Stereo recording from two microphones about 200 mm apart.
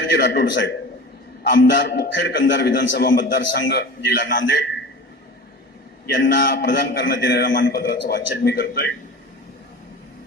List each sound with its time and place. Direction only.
0.1 s a man's voice: 60° left (ahead or behind)
6.1 s a man's voice: 65° left (ahead or behind)